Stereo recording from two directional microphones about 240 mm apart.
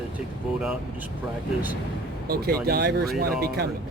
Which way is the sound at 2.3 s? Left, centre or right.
Right.